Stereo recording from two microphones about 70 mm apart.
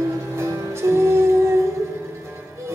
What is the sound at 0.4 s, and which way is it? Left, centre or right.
Music, right.